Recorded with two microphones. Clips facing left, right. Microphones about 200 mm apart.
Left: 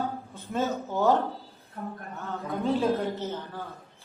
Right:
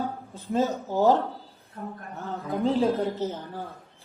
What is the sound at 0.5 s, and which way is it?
Speech, 35° right (ahead or behind).